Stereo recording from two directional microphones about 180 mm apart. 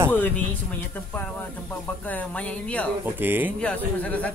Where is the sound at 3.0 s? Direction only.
10° right (ahead or behind).